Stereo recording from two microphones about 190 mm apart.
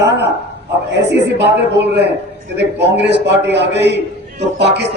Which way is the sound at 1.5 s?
65° right (ahead or behind).